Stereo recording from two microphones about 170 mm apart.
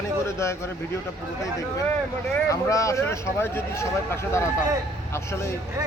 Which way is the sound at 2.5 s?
20° left (ahead or behind).